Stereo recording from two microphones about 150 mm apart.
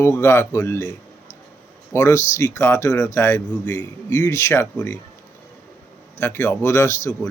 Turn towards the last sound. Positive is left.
turn(degrees=20)  # may be behind; listen again after turning